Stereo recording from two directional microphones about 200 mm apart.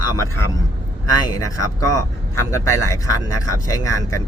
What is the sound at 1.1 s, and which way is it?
Speech, 20° left (ahead or behind).